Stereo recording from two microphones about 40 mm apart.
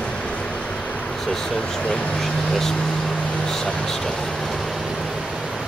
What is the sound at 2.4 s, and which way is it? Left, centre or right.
Speech, centre.